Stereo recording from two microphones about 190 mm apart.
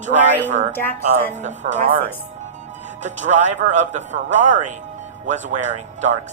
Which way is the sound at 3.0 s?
40° right (ahead or behind).